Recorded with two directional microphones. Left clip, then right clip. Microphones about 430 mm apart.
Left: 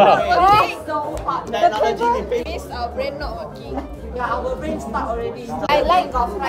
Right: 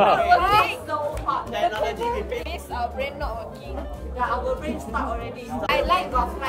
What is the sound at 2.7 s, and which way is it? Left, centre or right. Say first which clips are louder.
Music: left 2 dB; centre.